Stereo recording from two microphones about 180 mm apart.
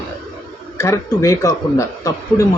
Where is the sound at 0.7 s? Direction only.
15° left (ahead or behind).